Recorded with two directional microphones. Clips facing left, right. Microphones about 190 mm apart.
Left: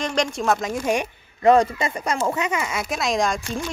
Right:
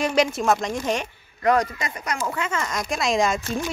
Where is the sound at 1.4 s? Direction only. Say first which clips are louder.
Left 5 dB; 25° left (ahead or behind); by 3.4 s 5° right (ahead or behind).